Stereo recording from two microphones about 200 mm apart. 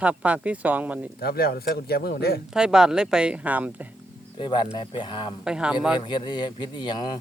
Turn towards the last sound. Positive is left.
turn(degrees=20)  # may be behind; listen again after turning